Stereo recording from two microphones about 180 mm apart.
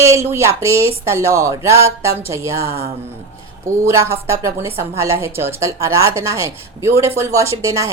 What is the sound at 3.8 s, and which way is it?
A woman's voice, 15° right (ahead or behind).